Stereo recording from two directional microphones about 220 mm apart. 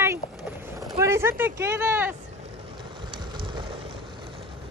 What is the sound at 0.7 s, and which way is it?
Speech, 10° right (ahead or behind).